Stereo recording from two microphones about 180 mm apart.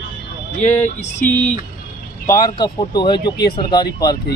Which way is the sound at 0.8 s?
40° left (ahead or behind).